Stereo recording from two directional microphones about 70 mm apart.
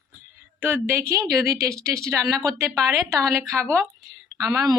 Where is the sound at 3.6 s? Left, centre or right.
Right.